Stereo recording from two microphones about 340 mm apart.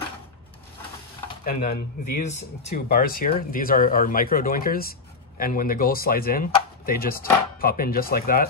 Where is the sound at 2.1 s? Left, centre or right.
Left.